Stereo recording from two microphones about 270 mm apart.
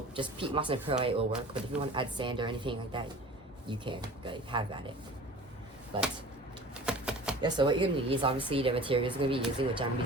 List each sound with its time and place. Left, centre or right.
0.2 s a woman's voice: centre
5.9 s a woman's voice: centre
6.7 s typewriter: centre
7.4 s a woman's voice: centre